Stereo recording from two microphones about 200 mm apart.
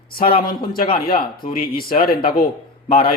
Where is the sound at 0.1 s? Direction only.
45° left (ahead or behind).